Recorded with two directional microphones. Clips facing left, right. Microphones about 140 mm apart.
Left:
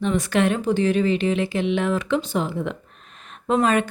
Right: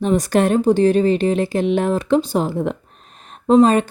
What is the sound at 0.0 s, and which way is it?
Speech, 40° right (ahead or behind).